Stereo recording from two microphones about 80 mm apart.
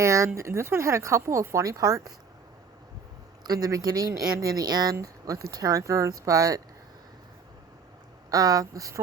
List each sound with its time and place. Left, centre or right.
0.0 s speech: right
3.4 s speech: right
8.3 s speech: right